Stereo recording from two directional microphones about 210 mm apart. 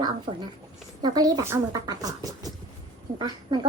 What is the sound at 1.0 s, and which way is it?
Speech, 20° right (ahead or behind).